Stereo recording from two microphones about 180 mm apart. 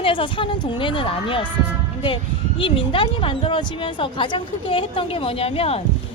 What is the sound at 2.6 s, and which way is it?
Speech, 30° left (ahead or behind).